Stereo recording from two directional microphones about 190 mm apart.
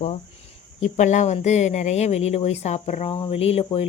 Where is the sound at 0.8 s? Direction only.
40° left (ahead or behind).